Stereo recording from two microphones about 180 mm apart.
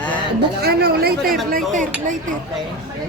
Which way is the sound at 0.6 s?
60° right (ahead or behind).